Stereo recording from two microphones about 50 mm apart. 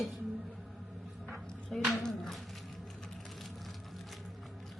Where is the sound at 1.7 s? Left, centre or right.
Centre.